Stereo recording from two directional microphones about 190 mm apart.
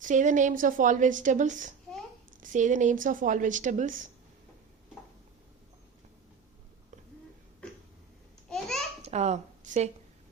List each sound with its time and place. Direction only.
0.0 s a woman's voice: 40° right (ahead or behind)
8.4 s babbling: centre (ahead or behind)
9.0 s a sound: 35° right (ahead or behind)